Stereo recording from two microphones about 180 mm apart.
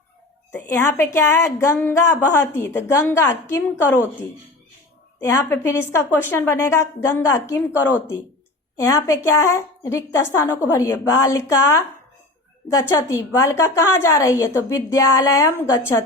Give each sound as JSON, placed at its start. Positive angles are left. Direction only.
{"t": 0.5, "sound": "a woman's voice", "side_deg": 10}
{"t": 5.2, "sound": "a woman's voice", "side_deg": 15}